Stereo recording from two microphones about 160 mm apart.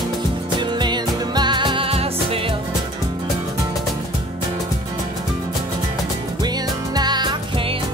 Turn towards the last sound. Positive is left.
turn(degrees=-25)  # may be behind; listen again after turning